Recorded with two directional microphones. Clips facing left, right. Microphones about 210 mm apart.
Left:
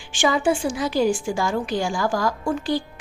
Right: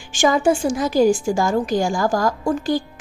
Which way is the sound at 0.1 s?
45° right (ahead or behind).